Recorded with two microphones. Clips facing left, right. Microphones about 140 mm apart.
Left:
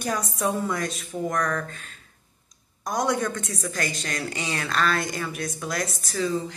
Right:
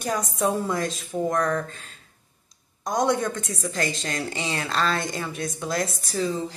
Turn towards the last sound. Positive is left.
turn(degrees=-25)  # may be behind; listen again after turning